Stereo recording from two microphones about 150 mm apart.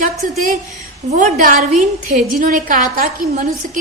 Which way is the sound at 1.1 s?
60° right (ahead or behind).